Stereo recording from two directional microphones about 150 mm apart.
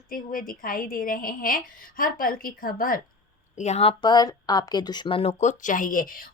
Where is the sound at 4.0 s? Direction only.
30° left (ahead or behind); by 6.3 s 65° left (ahead or behind).